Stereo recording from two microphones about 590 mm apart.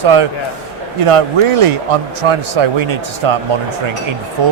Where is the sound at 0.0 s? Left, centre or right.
Right.